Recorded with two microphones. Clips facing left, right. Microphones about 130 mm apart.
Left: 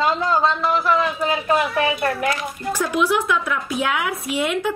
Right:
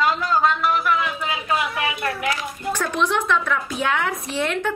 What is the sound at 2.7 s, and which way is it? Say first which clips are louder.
A woman's voice: left 2 dB; 10° left (ahead or behind).